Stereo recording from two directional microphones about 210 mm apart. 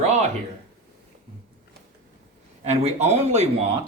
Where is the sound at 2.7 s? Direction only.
30° right (ahead or behind).